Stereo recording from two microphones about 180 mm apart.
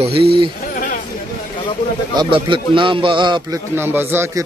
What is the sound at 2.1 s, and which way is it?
A man's voice, 25° right (ahead or behind).